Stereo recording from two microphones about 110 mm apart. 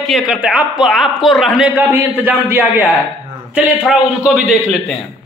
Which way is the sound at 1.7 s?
20° right (ahead or behind).